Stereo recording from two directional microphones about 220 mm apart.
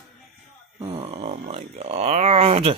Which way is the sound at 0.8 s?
15° right (ahead or behind).